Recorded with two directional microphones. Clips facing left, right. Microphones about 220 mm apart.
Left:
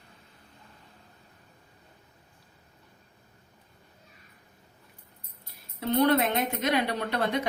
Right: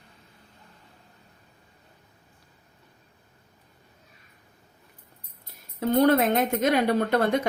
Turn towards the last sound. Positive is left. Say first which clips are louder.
# right 6 dB
turn(degrees=-50)  # may be behind; listen again after turning